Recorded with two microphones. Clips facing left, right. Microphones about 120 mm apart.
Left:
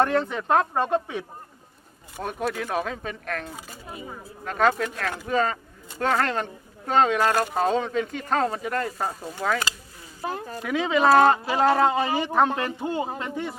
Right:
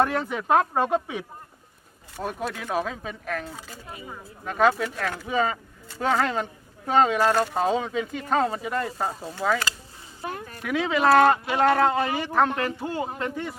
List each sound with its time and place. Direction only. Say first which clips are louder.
0.0 s speech: left 1 dB; 5° right (ahead or behind)
2.2 s speech: left 2 dB; centre (ahead or behind)
10.2 s speech: left 3 dB; 30° left (ahead or behind)
10.7 s speech: left 1 dB; centre (ahead or behind)
11.0 s speech: even; 25° left (ahead or behind)